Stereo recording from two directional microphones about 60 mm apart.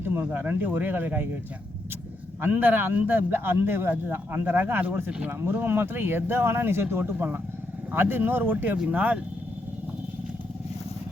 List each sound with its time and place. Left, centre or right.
0.0 s speech: right
2.4 s speech: right